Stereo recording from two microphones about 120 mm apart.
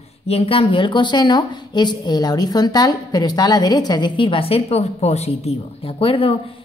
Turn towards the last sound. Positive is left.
turn(degrees=50)  # may be behind; listen again after turning